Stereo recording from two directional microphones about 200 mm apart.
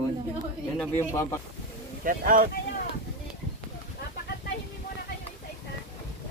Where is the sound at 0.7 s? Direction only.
5° left (ahead or behind).